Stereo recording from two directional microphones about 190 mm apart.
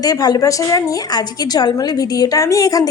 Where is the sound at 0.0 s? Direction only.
20° left (ahead or behind).